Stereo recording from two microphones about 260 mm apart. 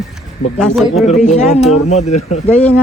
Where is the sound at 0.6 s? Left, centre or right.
Centre.